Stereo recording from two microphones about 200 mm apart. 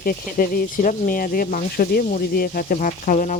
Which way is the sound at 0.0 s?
45° left (ahead or behind).